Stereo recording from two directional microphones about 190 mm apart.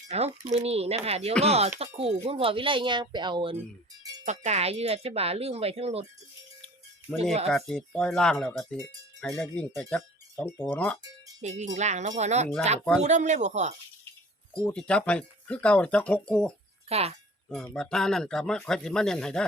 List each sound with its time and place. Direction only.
0.1 s speech: 35° right (ahead or behind)
7.5 s speech: 5° left (ahead or behind)
11.4 s speech: 40° right (ahead or behind)
14.6 s speech: 5° left (ahead or behind)
16.9 s speech: 35° right (ahead or behind)
17.5 s speech: centre (ahead or behind)